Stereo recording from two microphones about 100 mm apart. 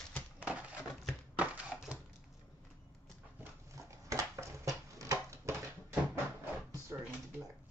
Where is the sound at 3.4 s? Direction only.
30° right (ahead or behind).